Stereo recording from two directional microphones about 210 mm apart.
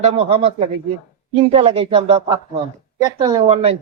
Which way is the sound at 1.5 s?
25° right (ahead or behind).